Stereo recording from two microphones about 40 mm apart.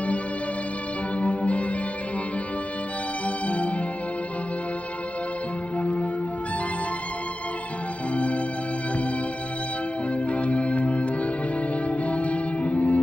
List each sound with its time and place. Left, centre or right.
1.2 s violin: left
3.3 s music: left
5.8 s music: left
8.1 s music: left
10.3 s music: left
12.1 s music: left